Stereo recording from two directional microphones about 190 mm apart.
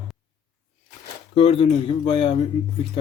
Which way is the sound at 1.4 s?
30° left (ahead or behind).